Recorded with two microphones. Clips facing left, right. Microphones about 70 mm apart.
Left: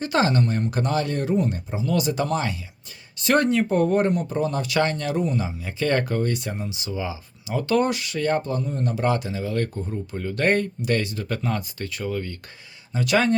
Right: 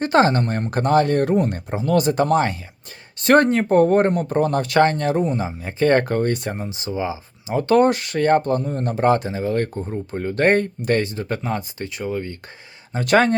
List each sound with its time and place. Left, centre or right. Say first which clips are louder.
0.0 s speech: right 5 dB; right
12.9 s speech: right 4 dB; right